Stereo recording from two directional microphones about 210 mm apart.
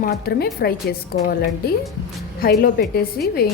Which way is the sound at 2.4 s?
45° left (ahead or behind).